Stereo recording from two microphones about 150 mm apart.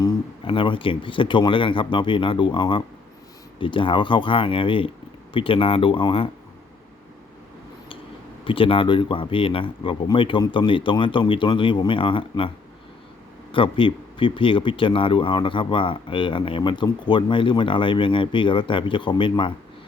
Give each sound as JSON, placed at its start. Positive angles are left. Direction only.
{"t": 0.4, "sound": "speech", "side_deg": 35}
{"t": 8.4, "sound": "speech", "side_deg": 35}
{"t": 13.5, "sound": "speech", "side_deg": 35}